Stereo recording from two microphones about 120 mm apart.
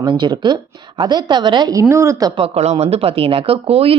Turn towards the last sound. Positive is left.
turn(degrees=-55)  # may be behind; listen again after turning